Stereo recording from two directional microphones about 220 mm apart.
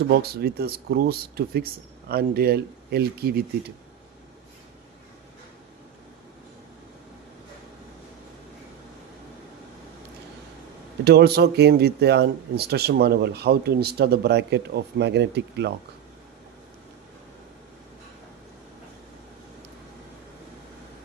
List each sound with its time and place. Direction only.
0.1 s speech: 45° right (ahead or behind)
11.0 s speech: 45° right (ahead or behind)